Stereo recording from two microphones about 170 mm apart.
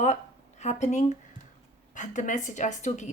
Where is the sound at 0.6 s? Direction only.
45° left (ahead or behind).